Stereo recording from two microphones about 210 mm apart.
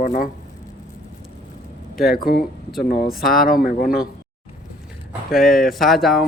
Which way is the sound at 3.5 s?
40° left (ahead or behind).